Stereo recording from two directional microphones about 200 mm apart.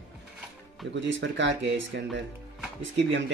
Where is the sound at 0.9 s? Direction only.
65° right (ahead or behind).